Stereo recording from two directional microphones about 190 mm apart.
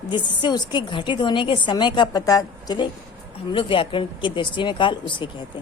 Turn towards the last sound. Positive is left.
turn(degrees=25)  # may be behind; listen again after turning